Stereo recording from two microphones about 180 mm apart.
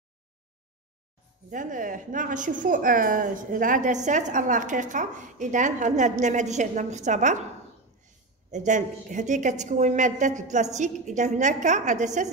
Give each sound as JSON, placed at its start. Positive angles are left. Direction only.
{"t": 1.5, "sound": "a woman's voice", "side_deg": -45}
{"t": 8.5, "sound": "a woman's voice", "side_deg": -40}